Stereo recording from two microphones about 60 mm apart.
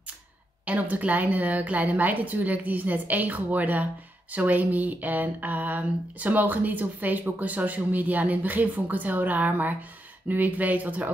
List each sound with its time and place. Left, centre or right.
0.7 s speech: right